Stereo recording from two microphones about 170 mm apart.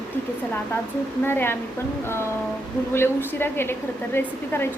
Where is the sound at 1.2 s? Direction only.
15° left (ahead or behind).